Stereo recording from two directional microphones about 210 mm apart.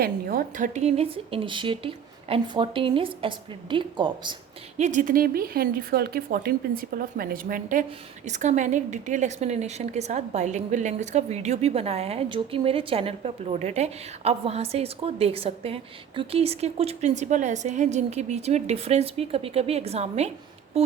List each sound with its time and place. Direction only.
0.0 s a woman's voice: 45° right (ahead or behind); by 4.4 s 20° right (ahead or behind)
4.8 s a woman's voice: 35° right (ahead or behind)